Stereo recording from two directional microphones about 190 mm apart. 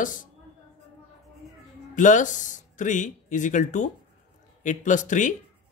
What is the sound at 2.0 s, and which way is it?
A man's voice, 40° left (ahead or behind).